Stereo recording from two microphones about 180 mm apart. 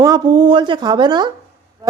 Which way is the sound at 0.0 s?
25° right (ahead or behind).